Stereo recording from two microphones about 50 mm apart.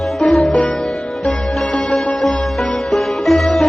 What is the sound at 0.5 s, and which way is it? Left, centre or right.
Sitar, left.